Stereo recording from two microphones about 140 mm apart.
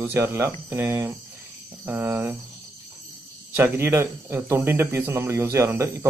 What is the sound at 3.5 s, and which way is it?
Speech, 15° right (ahead or behind).